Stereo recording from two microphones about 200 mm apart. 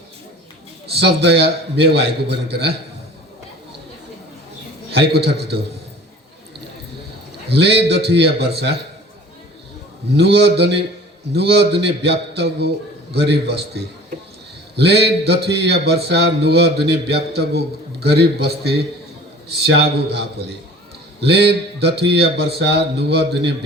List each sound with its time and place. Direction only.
0.9 s speech: 55° right (ahead or behind)
4.9 s speech: 55° right (ahead or behind)
7.6 s speech: 55° right (ahead or behind)
10.2 s speech: 55° right (ahead or behind)